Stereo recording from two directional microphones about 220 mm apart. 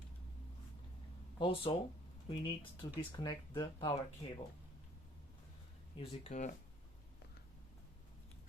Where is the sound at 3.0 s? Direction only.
20° left (ahead or behind).